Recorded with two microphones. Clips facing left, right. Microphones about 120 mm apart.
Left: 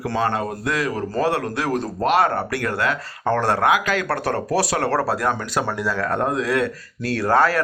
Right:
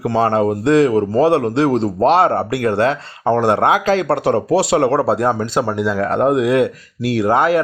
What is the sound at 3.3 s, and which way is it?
A man's voice, 20° right (ahead or behind).